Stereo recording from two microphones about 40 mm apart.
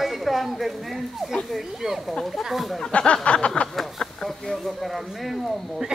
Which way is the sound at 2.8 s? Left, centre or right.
Left.